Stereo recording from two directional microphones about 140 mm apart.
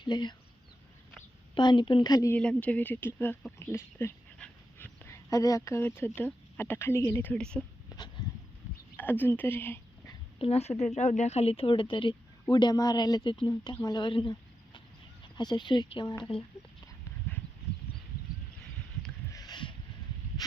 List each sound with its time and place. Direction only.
0.0 s speech: 30° left (ahead or behind)
1.5 s speech: 35° left (ahead or behind)
2.3 s speech: 10° left (ahead or behind)
5.0 s speech: 20° left (ahead or behind); by 7.6 s 5° left (ahead or behind)
7.9 s a sound: 25° left (ahead or behind)
9.0 s speech: 15° left (ahead or behind)
10.3 s speech: 45° left (ahead or behind)
19.3 s a sound: 30° left (ahead or behind)